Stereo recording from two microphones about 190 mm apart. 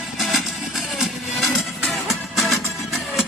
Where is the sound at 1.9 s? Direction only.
Centre (ahead or behind).